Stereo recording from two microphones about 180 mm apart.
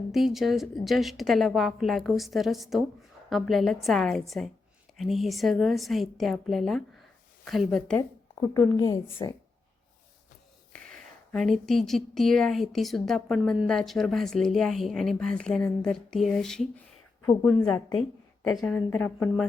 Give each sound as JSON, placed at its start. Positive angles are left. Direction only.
{"t": 0.1, "sound": "a woman's voice", "side_deg": 0}
{"t": 8.4, "sound": "a woman's voice", "side_deg": 15}
{"t": 10.9, "sound": "a woman's voice", "side_deg": 5}